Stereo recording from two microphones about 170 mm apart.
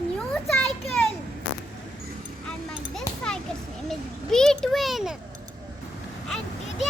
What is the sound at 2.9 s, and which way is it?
Children playing, 5° left (ahead or behind).